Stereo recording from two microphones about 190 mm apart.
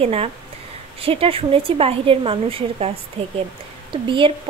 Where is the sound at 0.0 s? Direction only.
30° right (ahead or behind).